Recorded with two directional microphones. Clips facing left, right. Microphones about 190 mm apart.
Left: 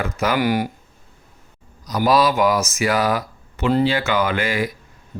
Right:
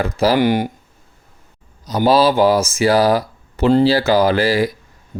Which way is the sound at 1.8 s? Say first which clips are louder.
Right 3 dB; 30° right (ahead or behind).